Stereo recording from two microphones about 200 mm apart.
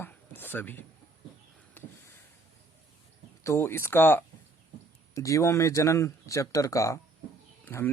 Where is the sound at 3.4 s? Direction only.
15° left (ahead or behind).